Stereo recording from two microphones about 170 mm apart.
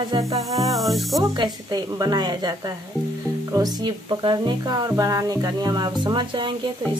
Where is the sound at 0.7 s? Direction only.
Centre (ahead or behind).